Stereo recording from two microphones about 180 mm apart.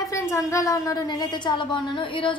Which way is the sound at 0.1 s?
15° left (ahead or behind).